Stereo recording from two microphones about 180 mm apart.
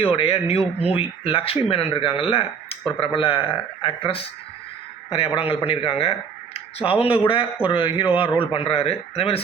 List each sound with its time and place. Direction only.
0.0 s a man's voice: 30° left (ahead or behind)